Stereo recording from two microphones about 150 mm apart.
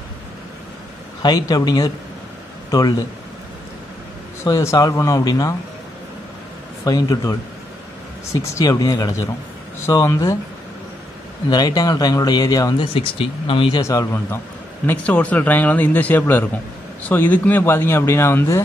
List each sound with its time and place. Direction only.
1.2 s speech: 25° left (ahead or behind)
4.5 s speech: 25° left (ahead or behind)
6.8 s speech: 25° left (ahead or behind)
8.4 s speech: 25° left (ahead or behind)
11.5 s speech: 25° left (ahead or behind)
12.7 s speech: 35° left (ahead or behind)
13.7 s a man's voice: 20° left (ahead or behind)